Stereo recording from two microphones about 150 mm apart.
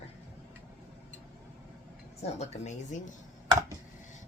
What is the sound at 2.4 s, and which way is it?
Speech, 50° left (ahead or behind).